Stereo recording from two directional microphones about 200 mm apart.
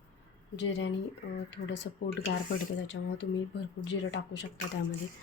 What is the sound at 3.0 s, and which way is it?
Speech, 90° left.